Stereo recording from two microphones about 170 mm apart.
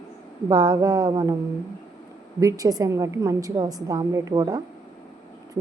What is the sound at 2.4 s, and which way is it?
A woman's voice, 20° right (ahead or behind).